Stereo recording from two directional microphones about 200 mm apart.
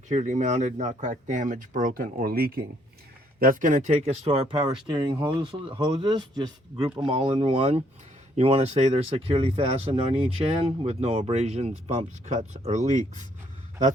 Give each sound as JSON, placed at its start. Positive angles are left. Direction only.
{"t": 0.1, "sound": "speech", "side_deg": -35}